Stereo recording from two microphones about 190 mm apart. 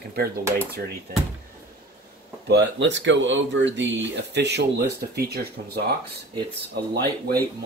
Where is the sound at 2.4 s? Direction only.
65° right (ahead or behind).